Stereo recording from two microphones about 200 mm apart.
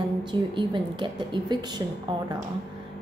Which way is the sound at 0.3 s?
25° right (ahead or behind).